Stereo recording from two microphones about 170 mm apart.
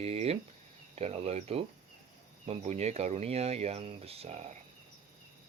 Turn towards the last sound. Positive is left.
turn(degrees=-40)  # may be behind; listen again after turning